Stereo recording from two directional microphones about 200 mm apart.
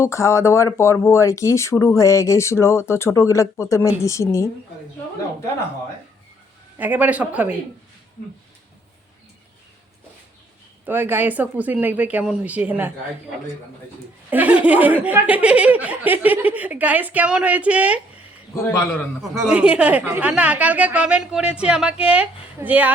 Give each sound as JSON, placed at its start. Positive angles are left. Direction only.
{"t": 0.0, "sound": "speech", "side_deg": 15}
{"t": 6.7, "sound": "speech", "side_deg": -10}
{"t": 10.8, "sound": "speech", "side_deg": -10}
{"t": 14.3, "sound": "speech", "side_deg": -5}
{"t": 18.5, "sound": "speech", "side_deg": 15}
{"t": 19.3, "sound": "a woman's voice", "side_deg": -5}